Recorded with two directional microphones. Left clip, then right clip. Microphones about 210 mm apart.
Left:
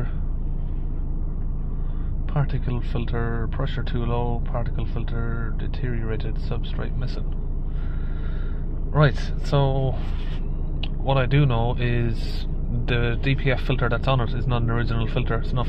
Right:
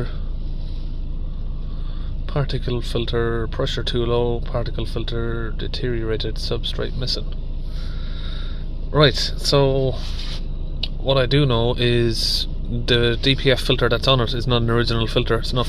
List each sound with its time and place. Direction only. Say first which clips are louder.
2.3 s speech: right 6 dB; 40° right (ahead or behind)
8.9 s speech: right 7 dB; 40° right (ahead or behind)